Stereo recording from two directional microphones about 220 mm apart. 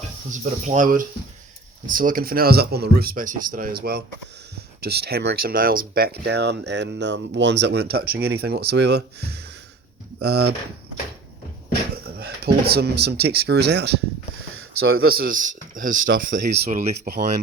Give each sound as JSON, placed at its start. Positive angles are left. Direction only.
{"t": 0.6, "sound": "speech", "side_deg": -35}
{"t": 12.0, "sound": "speech", "side_deg": -45}
{"t": 15.0, "sound": "speech", "side_deg": -45}